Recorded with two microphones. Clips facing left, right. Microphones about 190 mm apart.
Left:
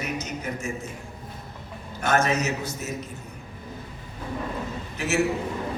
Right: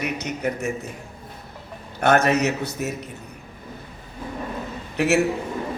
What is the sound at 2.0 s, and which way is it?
Speech, 65° right (ahead or behind).